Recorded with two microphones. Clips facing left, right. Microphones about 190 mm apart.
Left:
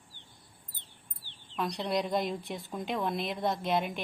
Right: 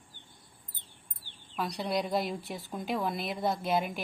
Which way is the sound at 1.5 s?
5° right (ahead or behind).